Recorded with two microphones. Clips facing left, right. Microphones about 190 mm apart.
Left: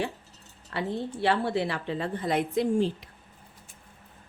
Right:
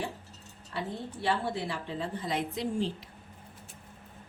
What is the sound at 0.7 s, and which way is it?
A woman's voice, 70° left (ahead or behind).